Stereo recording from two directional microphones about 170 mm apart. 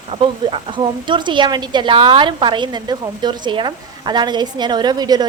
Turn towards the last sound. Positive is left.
turn(degrees=-25)  # may be behind; listen again after turning